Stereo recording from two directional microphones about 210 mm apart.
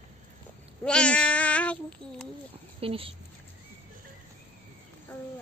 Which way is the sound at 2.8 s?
25° right (ahead or behind).